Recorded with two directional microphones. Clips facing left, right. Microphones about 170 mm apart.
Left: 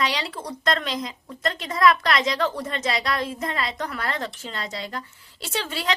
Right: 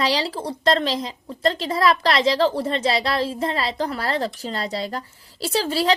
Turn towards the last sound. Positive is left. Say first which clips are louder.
# right 8 dB
turn(degrees=-35)  # may be behind; listen again after turning